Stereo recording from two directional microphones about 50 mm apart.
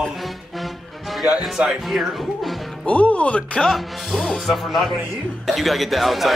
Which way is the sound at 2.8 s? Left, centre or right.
Left.